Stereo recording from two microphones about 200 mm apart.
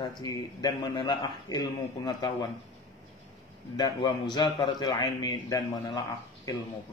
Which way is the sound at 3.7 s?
20° left (ahead or behind).